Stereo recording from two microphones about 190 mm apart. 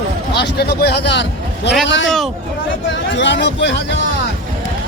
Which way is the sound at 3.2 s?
65° left (ahead or behind).